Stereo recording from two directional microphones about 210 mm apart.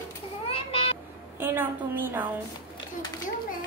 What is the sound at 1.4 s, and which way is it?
Speech, 10° right (ahead or behind).